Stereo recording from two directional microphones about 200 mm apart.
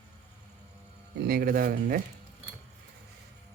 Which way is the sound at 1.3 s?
45° right (ahead or behind).